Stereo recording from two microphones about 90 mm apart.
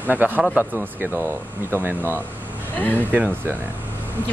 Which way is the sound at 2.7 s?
20° left (ahead or behind).